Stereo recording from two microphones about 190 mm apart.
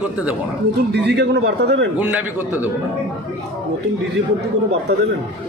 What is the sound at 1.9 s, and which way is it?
Speech, 10° right (ahead or behind).